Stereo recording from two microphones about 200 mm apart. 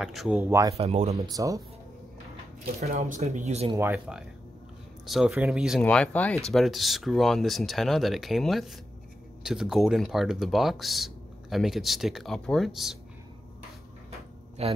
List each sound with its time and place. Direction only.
0.0 s speech: 5° right (ahead or behind)
0.7 s speech: 30° right (ahead or behind)
1.3 s speech: 15° right (ahead or behind)
2.9 s speech: 35° right (ahead or behind)
3.7 s speech: 10° right (ahead or behind)
14.6 s speech: 30° right (ahead or behind)